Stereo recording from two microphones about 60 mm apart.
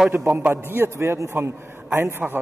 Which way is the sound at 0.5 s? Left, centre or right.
Right.